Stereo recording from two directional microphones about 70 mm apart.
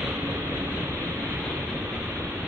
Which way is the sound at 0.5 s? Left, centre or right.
Right.